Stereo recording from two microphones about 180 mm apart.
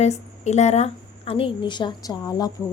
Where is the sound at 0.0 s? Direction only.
40° left (ahead or behind).